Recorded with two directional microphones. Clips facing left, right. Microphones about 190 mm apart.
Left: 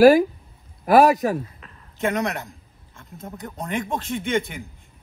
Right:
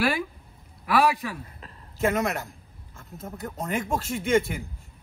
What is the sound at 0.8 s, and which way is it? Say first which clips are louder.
Speech: left 8 dB; 45° left (ahead or behind).